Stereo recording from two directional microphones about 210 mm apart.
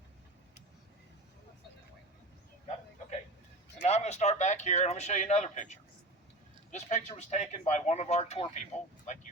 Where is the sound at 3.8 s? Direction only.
30° left (ahead or behind).